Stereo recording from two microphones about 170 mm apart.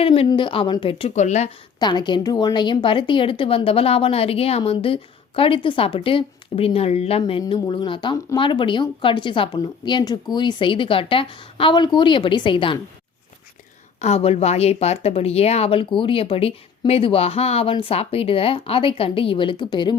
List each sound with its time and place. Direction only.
0.0 s a woman's voice: 35° left (ahead or behind)
1.8 s a woman's voice: 25° left (ahead or behind)
14.0 s a woman's voice: 40° left (ahead or behind)